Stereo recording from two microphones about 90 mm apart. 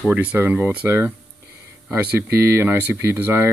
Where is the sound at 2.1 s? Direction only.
25° right (ahead or behind).